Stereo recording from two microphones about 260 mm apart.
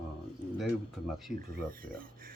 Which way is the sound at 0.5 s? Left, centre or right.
Centre.